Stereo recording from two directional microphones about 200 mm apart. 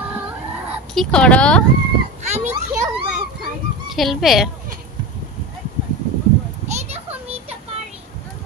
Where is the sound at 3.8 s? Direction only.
Centre (ahead or behind).